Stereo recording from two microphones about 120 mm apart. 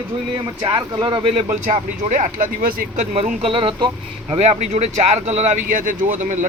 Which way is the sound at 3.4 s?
50° right (ahead or behind).